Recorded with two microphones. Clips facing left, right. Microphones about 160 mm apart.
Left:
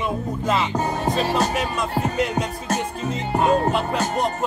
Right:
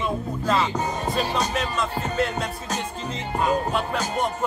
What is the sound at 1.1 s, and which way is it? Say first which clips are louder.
Music: left 3 dB; centre (ahead or behind).